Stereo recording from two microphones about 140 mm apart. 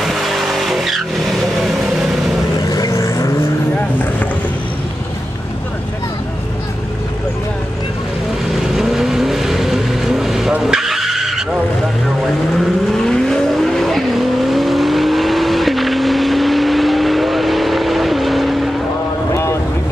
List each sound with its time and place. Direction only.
0.0 s vehicle: centre (ahead or behind)
2.7 s vehicle: 25° left (ahead or behind)
8.7 s vehicle: centre (ahead or behind)
12.5 s vehicle: 5° left (ahead or behind)